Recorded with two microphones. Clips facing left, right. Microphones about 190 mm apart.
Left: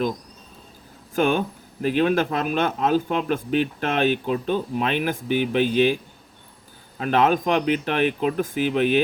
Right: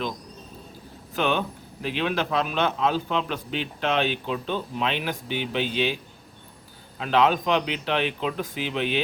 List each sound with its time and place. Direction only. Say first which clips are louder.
1.1 s a man's voice: left 4 dB; 45° left (ahead or behind)
7.0 s a man's voice: left 2 dB; 50° left (ahead or behind)